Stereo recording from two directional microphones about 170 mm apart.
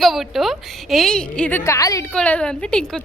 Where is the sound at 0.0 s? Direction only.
Centre (ahead or behind); by 2.0 s 20° left (ahead or behind).